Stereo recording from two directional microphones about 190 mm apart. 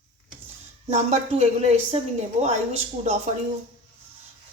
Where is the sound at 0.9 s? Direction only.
35° right (ahead or behind).